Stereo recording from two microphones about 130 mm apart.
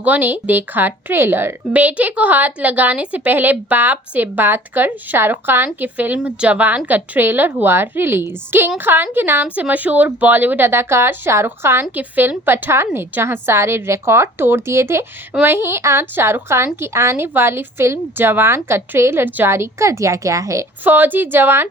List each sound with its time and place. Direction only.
0.0 s speech: 15° right (ahead or behind)